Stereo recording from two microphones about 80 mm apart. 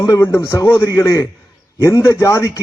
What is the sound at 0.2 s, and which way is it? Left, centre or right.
A man's voice, left.